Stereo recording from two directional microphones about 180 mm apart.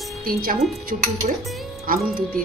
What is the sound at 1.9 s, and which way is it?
Speech, 50° right (ahead or behind).